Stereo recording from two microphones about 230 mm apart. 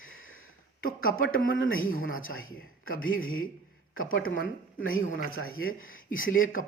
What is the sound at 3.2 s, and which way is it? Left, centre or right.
Speech, left.